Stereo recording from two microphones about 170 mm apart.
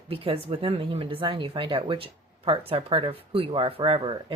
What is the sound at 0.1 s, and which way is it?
Speech, 35° right (ahead or behind).